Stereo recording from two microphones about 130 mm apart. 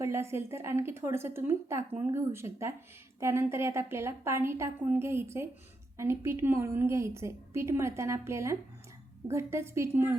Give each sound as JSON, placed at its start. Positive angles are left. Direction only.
{"t": 0.0, "sound": "a woman's voice", "side_deg": -20}